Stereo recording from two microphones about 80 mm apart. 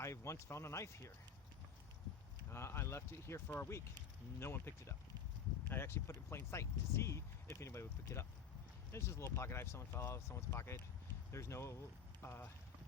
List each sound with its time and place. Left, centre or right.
0.0 s speech: left
2.5 s speech: left